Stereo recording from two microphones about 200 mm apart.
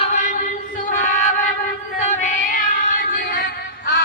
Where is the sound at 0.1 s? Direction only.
40° left (ahead or behind).